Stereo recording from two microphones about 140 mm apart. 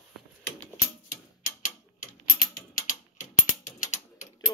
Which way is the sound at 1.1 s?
75° left (ahead or behind).